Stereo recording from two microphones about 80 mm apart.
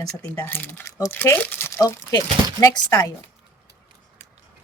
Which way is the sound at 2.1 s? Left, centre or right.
Left.